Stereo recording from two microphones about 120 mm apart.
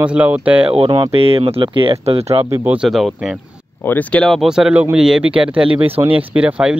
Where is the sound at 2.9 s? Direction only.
Centre (ahead or behind).